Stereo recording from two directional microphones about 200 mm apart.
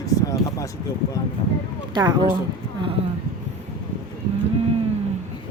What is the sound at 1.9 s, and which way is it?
Speech, 20° right (ahead or behind).